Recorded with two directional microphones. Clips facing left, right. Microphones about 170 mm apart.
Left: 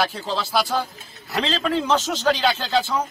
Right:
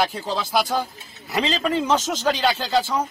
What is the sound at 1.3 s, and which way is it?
A man's voice, 5° right (ahead or behind).